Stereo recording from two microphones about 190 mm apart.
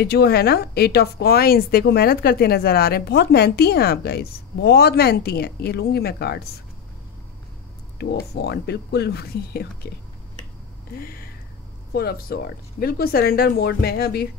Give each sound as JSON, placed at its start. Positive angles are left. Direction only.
{"t": 0.0, "sound": "speech", "side_deg": 55}
{"t": 8.0, "sound": "speech", "side_deg": 60}
{"t": 11.0, "sound": "a sound", "side_deg": 50}
{"t": 11.9, "sound": "speech", "side_deg": 55}